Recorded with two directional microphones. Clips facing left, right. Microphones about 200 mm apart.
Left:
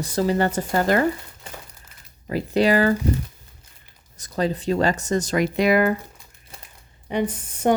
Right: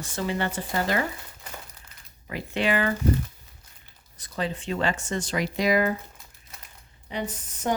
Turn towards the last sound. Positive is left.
turn(degrees=60)  # may be behind; listen again after turning